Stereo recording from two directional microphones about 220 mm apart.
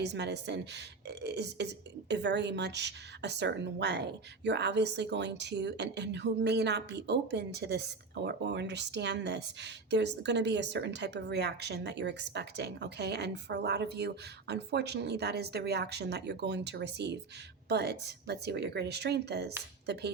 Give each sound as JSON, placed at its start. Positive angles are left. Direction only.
{"t": 0.0, "sound": "a woman's voice", "side_deg": -50}